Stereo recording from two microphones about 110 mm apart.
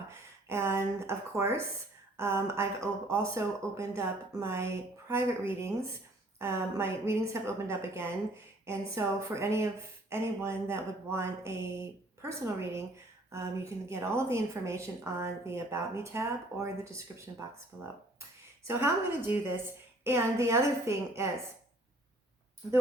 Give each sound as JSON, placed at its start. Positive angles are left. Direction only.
{"t": 0.1, "sound": "a woman's voice", "side_deg": -25}
{"t": 13.3, "sound": "a woman's voice", "side_deg": -25}
{"t": 18.7, "sound": "a woman's voice", "side_deg": -20}